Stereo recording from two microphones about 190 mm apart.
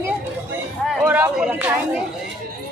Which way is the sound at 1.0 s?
5° right (ahead or behind).